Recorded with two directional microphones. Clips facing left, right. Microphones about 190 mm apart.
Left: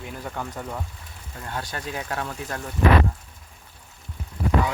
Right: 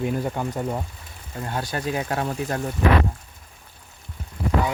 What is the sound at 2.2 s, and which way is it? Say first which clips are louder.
Speech: right 6 dB; 30° right (ahead or behind).